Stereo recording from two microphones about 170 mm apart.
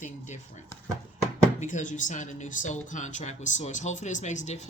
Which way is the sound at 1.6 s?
50° left (ahead or behind).